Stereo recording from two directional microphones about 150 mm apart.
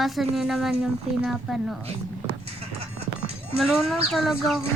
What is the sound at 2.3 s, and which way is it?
Music, 40° right (ahead or behind).